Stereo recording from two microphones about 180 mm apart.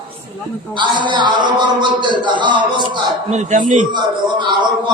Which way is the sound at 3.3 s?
40° right (ahead or behind).